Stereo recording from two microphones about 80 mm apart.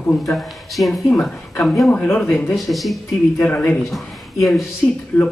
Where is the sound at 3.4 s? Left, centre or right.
Centre.